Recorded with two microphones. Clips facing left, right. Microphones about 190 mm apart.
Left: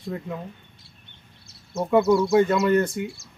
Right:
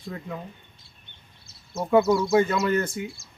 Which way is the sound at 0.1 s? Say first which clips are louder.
Left 3 dB; centre (ahead or behind).